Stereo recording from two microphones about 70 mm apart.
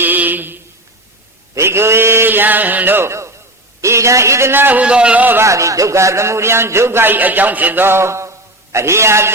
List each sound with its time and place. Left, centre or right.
0.0 s a sound: right
1.5 s chant: right
3.1 s a sound: right
3.8 s a man's voice: right
4.8 s a man's voice: centre
5.4 s a man's voice: right